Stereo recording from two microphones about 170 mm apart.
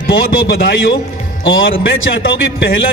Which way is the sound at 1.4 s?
90° left.